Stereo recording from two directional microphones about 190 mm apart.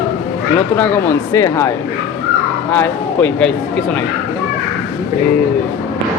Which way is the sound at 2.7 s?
10° left (ahead or behind).